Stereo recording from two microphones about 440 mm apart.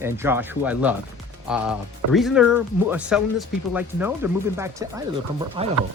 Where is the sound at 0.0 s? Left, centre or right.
Centre.